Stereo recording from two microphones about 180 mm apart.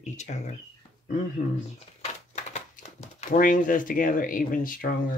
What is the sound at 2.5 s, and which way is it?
Speech, 40° left (ahead or behind).